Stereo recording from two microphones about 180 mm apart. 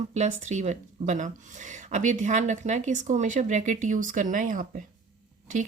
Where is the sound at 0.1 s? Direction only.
40° right (ahead or behind).